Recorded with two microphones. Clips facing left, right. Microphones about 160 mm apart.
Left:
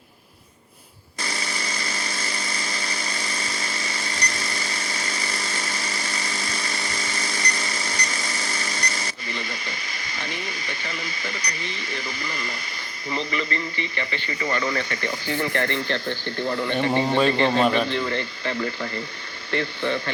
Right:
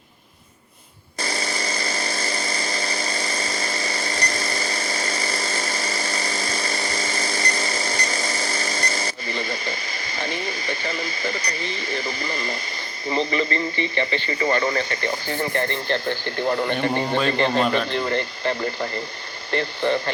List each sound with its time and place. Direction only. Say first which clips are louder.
1.2 s power tool: right 4 dB; 35° right (ahead or behind)
13.1 s a man's voice: right 5 dB; 25° right (ahead or behind)
16.5 s speech: right 4 dB; 55° right (ahead or behind)
16.9 s a man's voice: left 2 dB; centre (ahead or behind)
17.9 s speech: right 2 dB; 40° right (ahead or behind)